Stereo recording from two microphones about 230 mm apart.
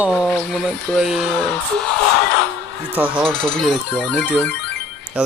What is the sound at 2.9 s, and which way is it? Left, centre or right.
Speech, centre.